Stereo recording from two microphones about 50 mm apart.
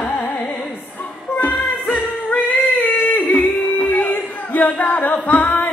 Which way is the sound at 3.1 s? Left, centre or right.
Left.